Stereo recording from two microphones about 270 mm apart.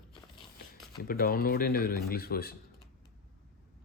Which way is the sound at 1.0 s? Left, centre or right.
Left.